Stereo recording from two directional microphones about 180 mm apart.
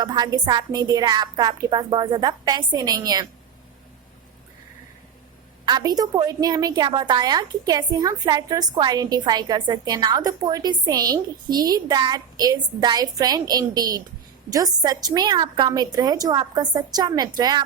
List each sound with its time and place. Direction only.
0.0 s a woman's voice: 20° right (ahead or behind)
5.6 s a woman's voice: 20° right (ahead or behind)